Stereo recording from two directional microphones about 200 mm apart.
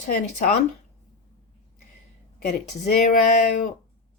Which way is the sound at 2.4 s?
45° left (ahead or behind).